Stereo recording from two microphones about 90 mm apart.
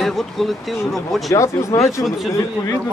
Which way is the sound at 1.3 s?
35° left (ahead or behind).